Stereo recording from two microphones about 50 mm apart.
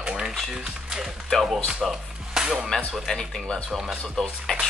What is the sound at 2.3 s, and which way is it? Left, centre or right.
Music, centre.